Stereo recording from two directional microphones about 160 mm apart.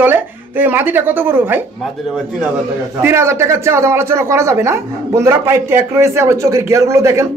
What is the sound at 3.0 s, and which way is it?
A man's voice, 15° right (ahead or behind).